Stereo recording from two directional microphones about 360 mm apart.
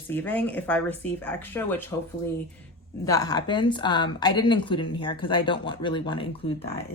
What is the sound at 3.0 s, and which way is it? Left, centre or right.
Speech, centre.